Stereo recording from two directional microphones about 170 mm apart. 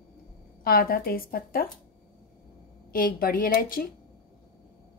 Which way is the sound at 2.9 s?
55° left (ahead or behind).